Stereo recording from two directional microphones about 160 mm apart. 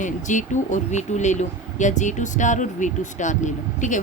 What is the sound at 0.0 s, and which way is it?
Speech, 50° left (ahead or behind).